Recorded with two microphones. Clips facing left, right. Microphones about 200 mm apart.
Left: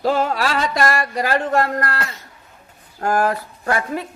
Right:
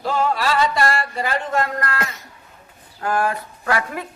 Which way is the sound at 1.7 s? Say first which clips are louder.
Left 3 dB; 40° left (ahead or behind).